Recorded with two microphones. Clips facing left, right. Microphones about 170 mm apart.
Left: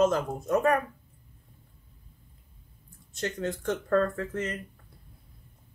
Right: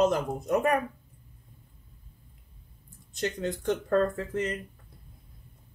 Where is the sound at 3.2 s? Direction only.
15° right (ahead or behind).